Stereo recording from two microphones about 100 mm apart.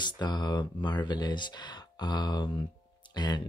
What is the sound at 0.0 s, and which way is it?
Speech, 45° left (ahead or behind).